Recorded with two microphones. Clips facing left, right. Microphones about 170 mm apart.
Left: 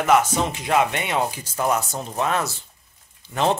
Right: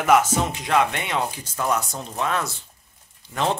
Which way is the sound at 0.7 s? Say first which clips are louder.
Left 1 dB; 5° left (ahead or behind).